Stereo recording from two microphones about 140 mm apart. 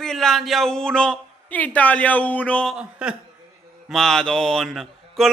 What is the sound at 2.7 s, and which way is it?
A man's voice, 5° right (ahead or behind).